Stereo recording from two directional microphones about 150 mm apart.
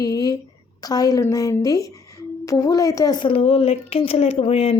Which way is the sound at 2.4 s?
20° left (ahead or behind).